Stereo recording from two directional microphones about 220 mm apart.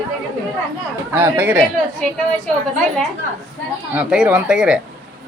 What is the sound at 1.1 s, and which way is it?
Speech, 10° right (ahead or behind).